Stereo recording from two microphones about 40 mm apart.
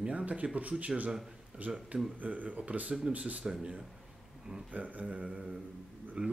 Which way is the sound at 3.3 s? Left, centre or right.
Right.